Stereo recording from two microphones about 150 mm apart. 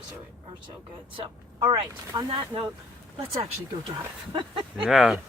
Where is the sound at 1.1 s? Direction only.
35° right (ahead or behind).